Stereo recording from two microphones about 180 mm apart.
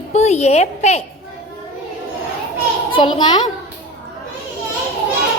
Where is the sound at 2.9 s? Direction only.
25° left (ahead or behind).